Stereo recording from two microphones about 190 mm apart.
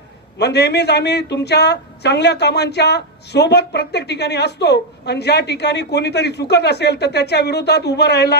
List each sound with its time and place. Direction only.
0.4 s a woman's voice: 60° left (ahead or behind)